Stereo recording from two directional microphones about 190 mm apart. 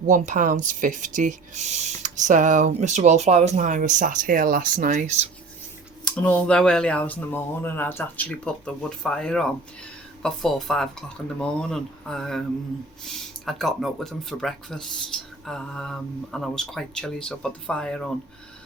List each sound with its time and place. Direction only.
0.0 s speech: 40° right (ahead or behind)
6.1 s speech: 5° left (ahead or behind)
13.4 s speech: centre (ahead or behind)